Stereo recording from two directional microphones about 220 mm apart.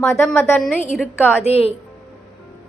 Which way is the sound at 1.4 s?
25° left (ahead or behind).